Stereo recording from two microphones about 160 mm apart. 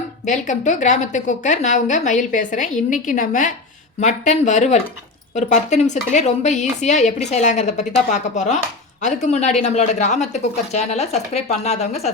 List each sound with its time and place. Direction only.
0.3 s a woman's voice: 50° left (ahead or behind)